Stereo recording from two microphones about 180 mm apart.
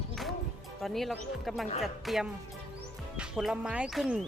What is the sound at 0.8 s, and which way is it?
Speech, centre (ahead or behind).